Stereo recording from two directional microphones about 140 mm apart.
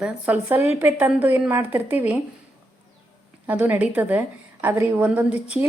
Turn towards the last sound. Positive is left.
turn(degrees=-10)  # may be behind; listen again after turning